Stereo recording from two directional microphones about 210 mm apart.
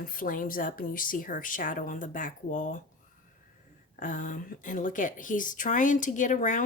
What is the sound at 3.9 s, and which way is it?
Speech, 40° left (ahead or behind).